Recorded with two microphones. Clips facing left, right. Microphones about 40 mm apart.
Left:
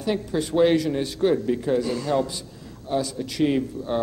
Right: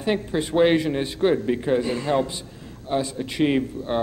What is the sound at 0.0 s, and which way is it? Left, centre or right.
A man's voice, right.